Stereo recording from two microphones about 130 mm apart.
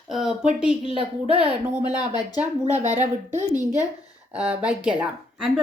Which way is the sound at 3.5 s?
25° left (ahead or behind).